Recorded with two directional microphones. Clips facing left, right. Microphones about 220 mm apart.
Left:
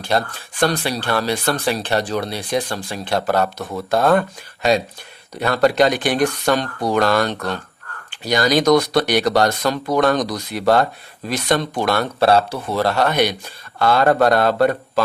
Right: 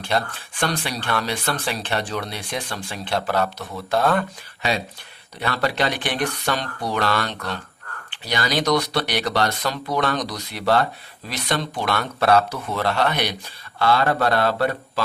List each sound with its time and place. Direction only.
0.1 s speech: 40° left (ahead or behind)
5.3 s speech: 45° left (ahead or behind)